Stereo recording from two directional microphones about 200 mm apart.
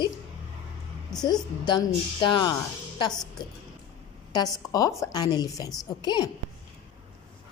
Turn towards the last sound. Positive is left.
turn(degrees=20)  # may be behind; listen again after turning